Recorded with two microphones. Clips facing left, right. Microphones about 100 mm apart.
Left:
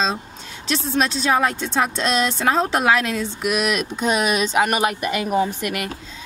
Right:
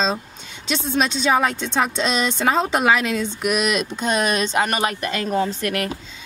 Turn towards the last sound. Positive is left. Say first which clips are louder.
# even
turn(degrees=10)  # may be behind; listen again after turning